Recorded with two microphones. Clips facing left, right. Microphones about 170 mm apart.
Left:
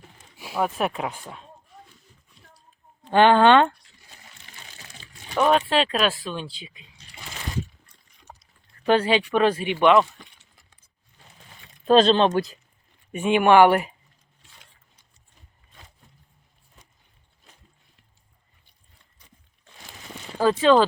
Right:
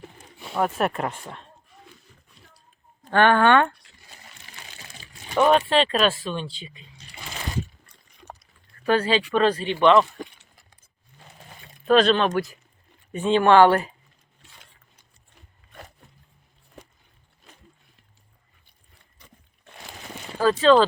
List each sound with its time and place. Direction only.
0.3 s speech: 5° left (ahead or behind)
3.1 s speech: 15° left (ahead or behind)
5.4 s speech: centre (ahead or behind)
8.2 s a sound: 65° right (ahead or behind)
8.8 s speech: 20° left (ahead or behind)
10.2 s a sound: 45° right (ahead or behind)
11.9 s speech: 30° left (ahead or behind)
13.1 s speech: 15° left (ahead or behind)
20.4 s speech: 15° left (ahead or behind)